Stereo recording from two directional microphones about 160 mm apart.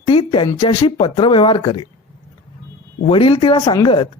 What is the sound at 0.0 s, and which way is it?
Speech, 35° left (ahead or behind).